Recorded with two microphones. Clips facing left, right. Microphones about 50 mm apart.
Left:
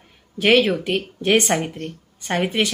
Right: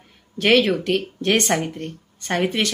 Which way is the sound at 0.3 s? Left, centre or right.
Centre.